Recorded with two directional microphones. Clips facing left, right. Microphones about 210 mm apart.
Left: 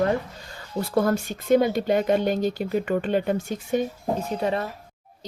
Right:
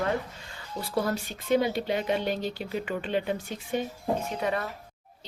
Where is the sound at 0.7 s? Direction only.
50° left (ahead or behind).